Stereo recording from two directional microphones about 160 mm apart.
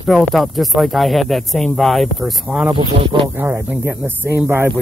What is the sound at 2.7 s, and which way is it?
Speech, 30° right (ahead or behind).